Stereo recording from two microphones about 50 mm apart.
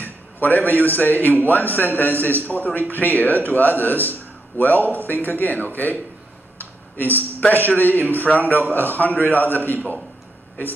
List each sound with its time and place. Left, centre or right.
0.0 s a man's voice: left